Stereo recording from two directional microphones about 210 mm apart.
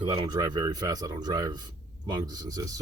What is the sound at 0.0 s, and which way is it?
Speech, 25° right (ahead or behind).